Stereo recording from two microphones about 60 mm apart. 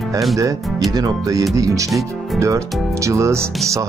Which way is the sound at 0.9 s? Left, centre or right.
Right.